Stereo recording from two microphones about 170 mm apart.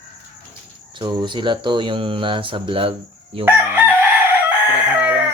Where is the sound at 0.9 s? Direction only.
25° right (ahead or behind).